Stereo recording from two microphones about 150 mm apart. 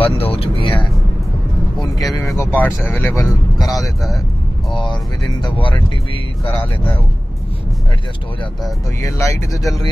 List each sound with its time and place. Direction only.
0.0 s vehicle: 40° left (ahead or behind)
0.7 s music: centre (ahead or behind)
2.0 s speech: 25° left (ahead or behind)
3.6 s speech: centre (ahead or behind)
5.4 s speech: 35° left (ahead or behind)
9.0 s speech: 20° left (ahead or behind)